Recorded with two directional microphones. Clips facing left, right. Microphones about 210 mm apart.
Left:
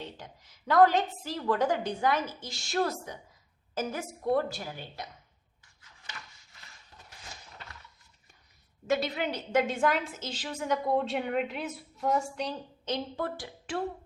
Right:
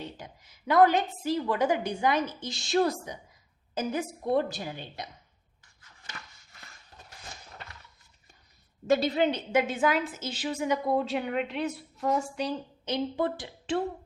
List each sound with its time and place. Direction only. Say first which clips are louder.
0.0 s a woman's voice: right 2 dB; 10° right (ahead or behind)
8.9 s a woman's voice: right 5 dB; 30° right (ahead or behind)
9.5 s a woman's voice: right 1 dB; 5° right (ahead or behind)